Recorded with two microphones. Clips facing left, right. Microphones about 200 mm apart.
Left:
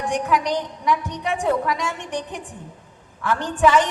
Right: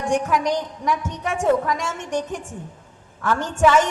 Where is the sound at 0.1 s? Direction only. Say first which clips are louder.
Right 2 dB; 45° right (ahead or behind).